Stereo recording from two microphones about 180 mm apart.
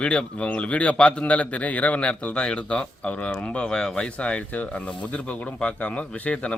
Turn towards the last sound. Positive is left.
turn(degrees=5)  # may be behind; listen again after turning